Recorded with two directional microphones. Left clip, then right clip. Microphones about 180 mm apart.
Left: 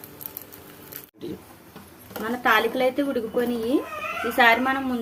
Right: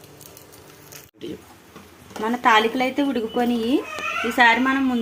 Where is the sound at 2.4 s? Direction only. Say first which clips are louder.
Right 3 dB; 30° right (ahead or behind).